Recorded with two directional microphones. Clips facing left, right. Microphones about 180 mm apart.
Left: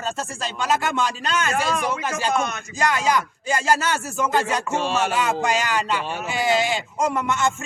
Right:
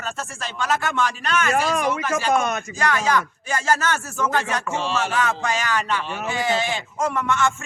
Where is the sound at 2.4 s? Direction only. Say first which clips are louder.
Right 2 dB; 50° right (ahead or behind).